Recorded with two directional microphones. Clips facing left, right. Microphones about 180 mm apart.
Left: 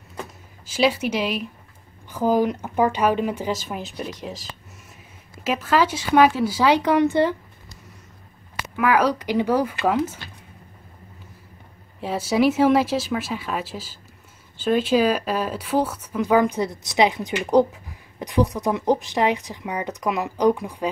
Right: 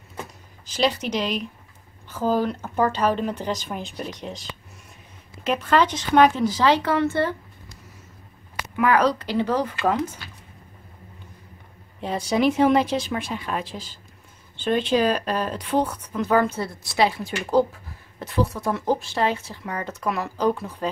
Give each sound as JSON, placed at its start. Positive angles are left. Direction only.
{"t": 0.7, "sound": "speech", "side_deg": 10}
{"t": 8.7, "sound": "speech", "side_deg": 5}
{"t": 12.0, "sound": "speech", "side_deg": 5}